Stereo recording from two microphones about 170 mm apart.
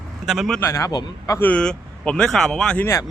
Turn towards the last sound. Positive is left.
turn(degrees=15)  # may be behind; listen again after turning